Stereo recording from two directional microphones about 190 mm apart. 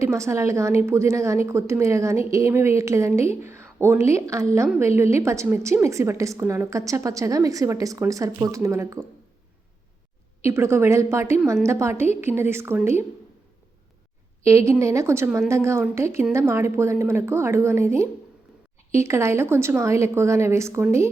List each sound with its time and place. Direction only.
0.0 s a woman's voice: 15° right (ahead or behind)
10.4 s a woman's voice: 15° right (ahead or behind)
14.4 s a woman's voice: 15° right (ahead or behind)